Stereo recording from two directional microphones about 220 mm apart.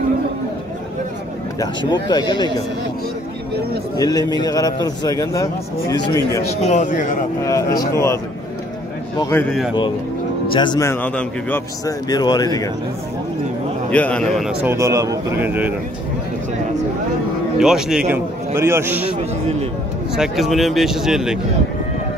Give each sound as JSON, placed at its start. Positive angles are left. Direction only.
{"t": 1.9, "sound": "speech", "side_deg": 20}
{"t": 3.9, "sound": "a man's voice", "side_deg": 15}
{"t": 6.6, "sound": "a man's voice", "side_deg": 35}
{"t": 7.4, "sound": "a man's voice", "side_deg": 15}
{"t": 9.2, "sound": "a man's voice", "side_deg": 10}
{"t": 10.5, "sound": "a man's voice", "side_deg": 20}
{"t": 13.9, "sound": "a man's voice", "side_deg": 5}
{"t": 17.6, "sound": "a man's voice", "side_deg": 0}
{"t": 20.2, "sound": "speech", "side_deg": 0}